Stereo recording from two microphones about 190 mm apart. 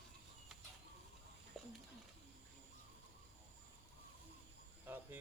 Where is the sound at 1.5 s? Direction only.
Centre (ahead or behind).